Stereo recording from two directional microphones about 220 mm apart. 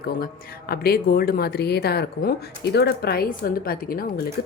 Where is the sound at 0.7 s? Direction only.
45° left (ahead or behind).